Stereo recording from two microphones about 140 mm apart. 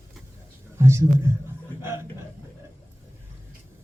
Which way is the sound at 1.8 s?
15° right (ahead or behind).